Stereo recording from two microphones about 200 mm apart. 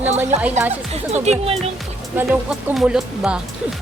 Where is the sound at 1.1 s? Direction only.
35° right (ahead or behind).